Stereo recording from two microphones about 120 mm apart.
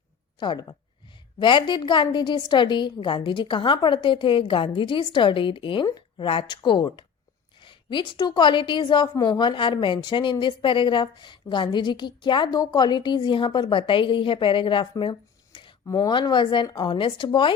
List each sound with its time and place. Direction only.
0.3 s a woman's voice: 35° left (ahead or behind)